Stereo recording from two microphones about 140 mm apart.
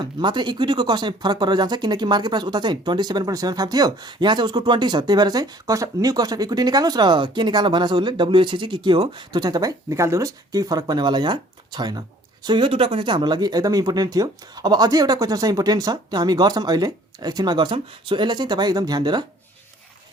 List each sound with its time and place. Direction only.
0.0 s speech: 30° right (ahead or behind)